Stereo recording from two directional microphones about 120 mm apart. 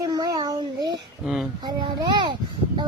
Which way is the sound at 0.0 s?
30° right (ahead or behind).